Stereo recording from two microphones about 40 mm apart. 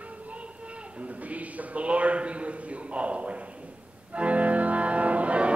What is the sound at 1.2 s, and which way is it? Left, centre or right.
A man's voice, right.